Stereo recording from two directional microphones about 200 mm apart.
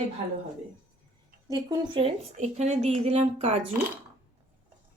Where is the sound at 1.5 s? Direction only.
20° right (ahead or behind).